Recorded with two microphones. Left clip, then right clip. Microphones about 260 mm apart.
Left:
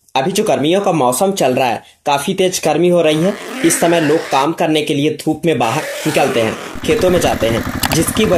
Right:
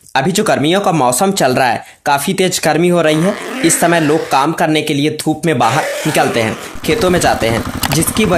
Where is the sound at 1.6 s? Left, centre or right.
Right.